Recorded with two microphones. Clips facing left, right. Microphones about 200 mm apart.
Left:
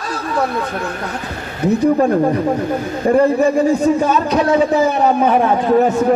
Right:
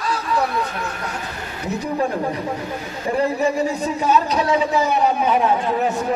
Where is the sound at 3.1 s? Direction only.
50° left (ahead or behind).